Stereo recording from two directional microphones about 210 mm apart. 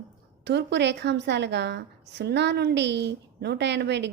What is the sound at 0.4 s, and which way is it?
A woman's voice, 55° right (ahead or behind).